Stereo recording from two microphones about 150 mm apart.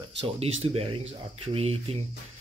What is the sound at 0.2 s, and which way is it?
Speech, 40° right (ahead or behind).